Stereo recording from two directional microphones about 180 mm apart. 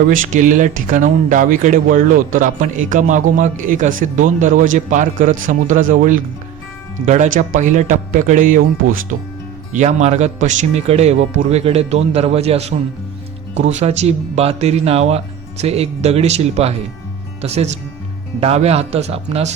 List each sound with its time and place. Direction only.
0.1 s speech: 45° right (ahead or behind)